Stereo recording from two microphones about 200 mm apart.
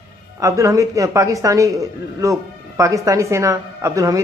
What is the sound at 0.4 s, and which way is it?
A man's voice, 15° right (ahead or behind).